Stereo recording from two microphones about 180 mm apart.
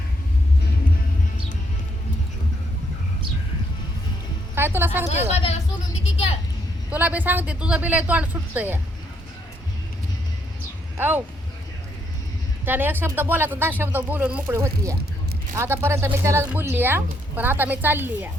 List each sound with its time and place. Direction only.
4.5 s music: 15° right (ahead or behind)
5.1 s speech: 35° left (ahead or behind)
6.9 s speech: 10° right (ahead or behind)
10.9 s speech: 10° right (ahead or behind)
12.6 s speech: 10° right (ahead or behind)